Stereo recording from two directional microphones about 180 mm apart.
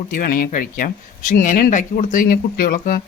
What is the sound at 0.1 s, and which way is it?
Speech, 50° left (ahead or behind).